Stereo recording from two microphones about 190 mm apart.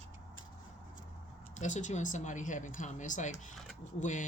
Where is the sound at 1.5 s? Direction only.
40° left (ahead or behind).